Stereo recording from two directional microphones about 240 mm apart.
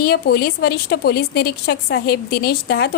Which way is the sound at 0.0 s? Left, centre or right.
Left.